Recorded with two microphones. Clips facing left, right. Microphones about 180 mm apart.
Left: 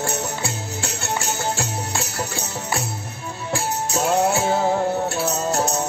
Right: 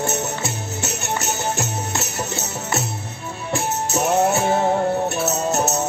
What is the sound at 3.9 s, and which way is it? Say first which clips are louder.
Music: right 1 dB; 20° right (ahead or behind).